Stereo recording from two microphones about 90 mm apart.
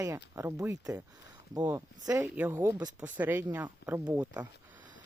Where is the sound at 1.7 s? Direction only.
35° right (ahead or behind).